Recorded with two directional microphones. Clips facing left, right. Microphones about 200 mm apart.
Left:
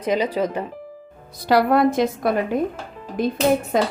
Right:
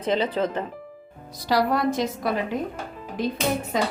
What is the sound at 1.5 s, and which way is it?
A woman's voice, 55° left (ahead or behind).